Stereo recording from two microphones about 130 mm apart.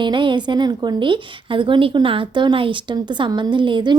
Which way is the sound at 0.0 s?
35° right (ahead or behind).